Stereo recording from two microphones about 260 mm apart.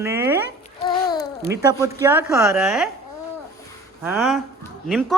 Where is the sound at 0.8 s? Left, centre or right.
Centre.